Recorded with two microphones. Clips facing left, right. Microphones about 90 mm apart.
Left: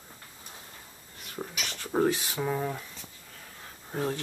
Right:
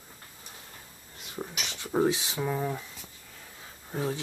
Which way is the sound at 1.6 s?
5° right (ahead or behind).